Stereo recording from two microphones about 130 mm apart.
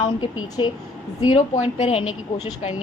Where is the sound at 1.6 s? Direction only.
50° left (ahead or behind).